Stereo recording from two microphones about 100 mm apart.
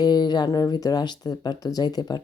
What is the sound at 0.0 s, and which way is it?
Speech, 45° left (ahead or behind).